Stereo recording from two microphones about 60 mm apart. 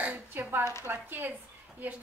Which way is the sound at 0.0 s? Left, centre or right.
Right.